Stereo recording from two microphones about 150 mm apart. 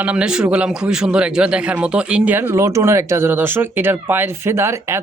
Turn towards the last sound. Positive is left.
turn(degrees=-15)  # may be behind; listen again after turning